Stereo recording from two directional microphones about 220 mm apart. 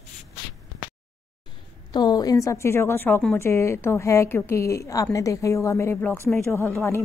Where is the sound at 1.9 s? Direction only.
20° left (ahead or behind).